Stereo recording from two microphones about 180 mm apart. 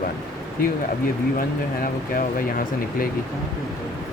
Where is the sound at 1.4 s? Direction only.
50° left (ahead or behind).